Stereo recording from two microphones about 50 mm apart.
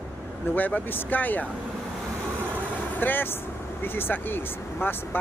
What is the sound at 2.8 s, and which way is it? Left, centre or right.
Speech, left.